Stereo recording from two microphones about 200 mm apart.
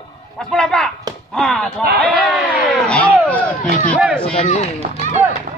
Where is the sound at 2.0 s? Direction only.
Centre (ahead or behind).